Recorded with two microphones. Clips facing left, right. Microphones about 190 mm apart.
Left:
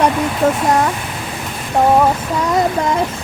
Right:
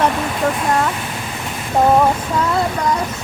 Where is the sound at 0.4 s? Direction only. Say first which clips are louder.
Left 4 dB; 20° left (ahead or behind).